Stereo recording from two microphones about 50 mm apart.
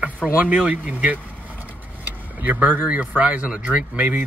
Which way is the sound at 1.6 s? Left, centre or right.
Right.